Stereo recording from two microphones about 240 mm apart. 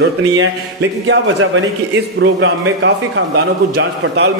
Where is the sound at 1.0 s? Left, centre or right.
Right.